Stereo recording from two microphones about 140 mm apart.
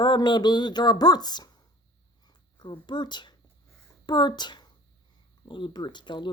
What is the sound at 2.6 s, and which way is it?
Speech, 30° left (ahead or behind).